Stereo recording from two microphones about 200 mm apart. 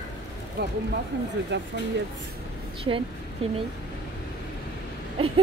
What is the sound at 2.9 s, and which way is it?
Speech, 25° right (ahead or behind).